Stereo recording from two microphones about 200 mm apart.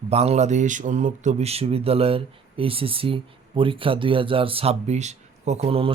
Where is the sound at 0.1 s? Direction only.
30° right (ahead or behind).